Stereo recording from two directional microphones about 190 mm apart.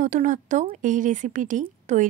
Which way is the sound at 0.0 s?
40° right (ahead or behind).